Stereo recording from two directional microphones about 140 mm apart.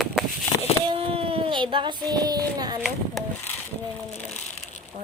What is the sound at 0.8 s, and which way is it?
Child singing, 40° right (ahead or behind).